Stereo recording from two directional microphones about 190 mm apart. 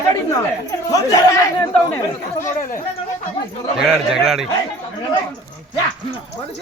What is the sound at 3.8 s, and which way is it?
Speech, 5° right (ahead or behind).